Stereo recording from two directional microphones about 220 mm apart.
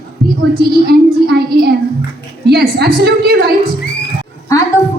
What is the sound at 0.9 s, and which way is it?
A man's voice, 45° right (ahead or behind).